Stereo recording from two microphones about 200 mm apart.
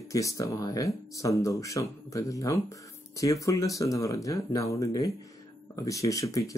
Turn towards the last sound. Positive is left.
turn(degrees=15)  # may be behind; listen again after turning